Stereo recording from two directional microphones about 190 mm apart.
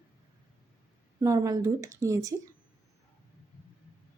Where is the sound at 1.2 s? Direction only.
20° right (ahead or behind).